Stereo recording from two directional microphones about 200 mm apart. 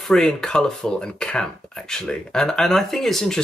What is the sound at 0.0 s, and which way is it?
Speech, centre (ahead or behind).